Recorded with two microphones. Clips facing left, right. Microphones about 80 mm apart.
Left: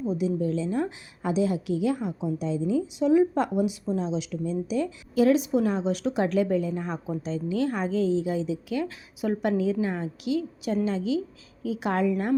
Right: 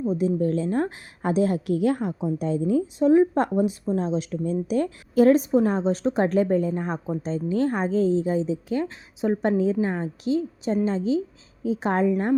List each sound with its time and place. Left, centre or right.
0.1 s a woman's voice: right